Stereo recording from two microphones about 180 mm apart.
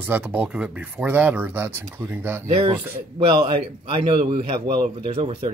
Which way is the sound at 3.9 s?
30° right (ahead or behind).